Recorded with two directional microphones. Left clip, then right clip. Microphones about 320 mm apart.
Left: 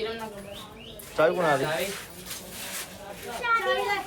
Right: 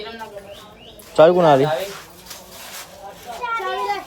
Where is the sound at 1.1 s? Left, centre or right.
Right.